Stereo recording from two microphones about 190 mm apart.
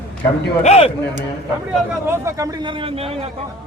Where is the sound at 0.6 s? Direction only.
35° left (ahead or behind).